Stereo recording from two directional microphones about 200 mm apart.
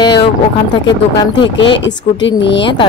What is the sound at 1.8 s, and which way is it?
Speech, 65° left (ahead or behind).